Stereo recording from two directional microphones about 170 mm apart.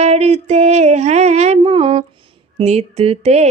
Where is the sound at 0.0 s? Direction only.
40° right (ahead or behind).